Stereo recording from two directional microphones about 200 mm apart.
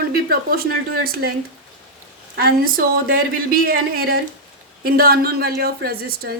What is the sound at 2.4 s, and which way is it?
A woman's voice, 50° right (ahead or behind).